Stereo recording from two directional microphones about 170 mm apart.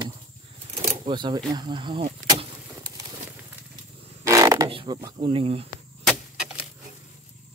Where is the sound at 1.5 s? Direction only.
25° right (ahead or behind).